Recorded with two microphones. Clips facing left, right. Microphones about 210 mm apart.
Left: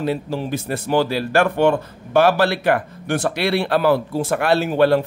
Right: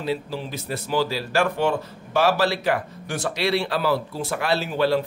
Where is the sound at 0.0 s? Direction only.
55° left (ahead or behind).